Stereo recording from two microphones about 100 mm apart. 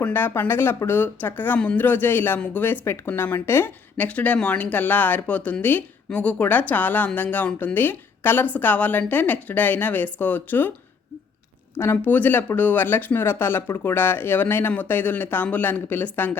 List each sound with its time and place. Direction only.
0.0 s speech: 20° left (ahead or behind)
11.7 s speech: 25° left (ahead or behind)